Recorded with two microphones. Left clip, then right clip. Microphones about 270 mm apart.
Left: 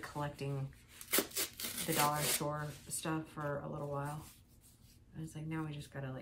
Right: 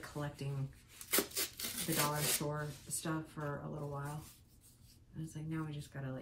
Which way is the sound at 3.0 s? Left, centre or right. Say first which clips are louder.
Left 2 dB; left.